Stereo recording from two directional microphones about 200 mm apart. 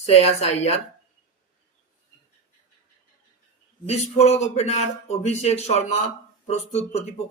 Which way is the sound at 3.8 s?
35° left (ahead or behind).